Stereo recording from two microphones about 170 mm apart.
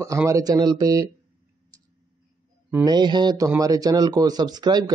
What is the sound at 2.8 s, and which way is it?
Speech, 25° right (ahead or behind).